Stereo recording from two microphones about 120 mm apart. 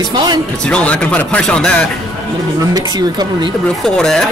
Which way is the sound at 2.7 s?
35° right (ahead or behind).